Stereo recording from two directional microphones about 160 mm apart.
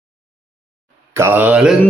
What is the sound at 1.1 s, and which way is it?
Speech, 15° right (ahead or behind).